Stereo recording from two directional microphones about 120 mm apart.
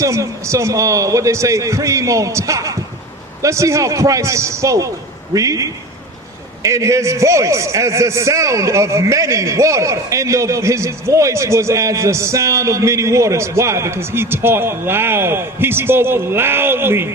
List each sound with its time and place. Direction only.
0.0 s a man's voice: 25° right (ahead or behind)